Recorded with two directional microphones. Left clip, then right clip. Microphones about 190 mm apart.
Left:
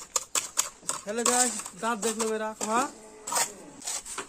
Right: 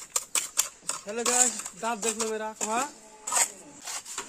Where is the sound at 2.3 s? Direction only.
50° right (ahead or behind).